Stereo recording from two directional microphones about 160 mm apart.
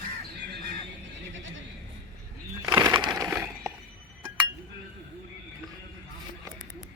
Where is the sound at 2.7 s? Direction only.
25° right (ahead or behind).